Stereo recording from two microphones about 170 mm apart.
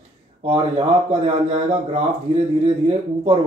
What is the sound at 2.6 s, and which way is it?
Speech, 35° right (ahead or behind).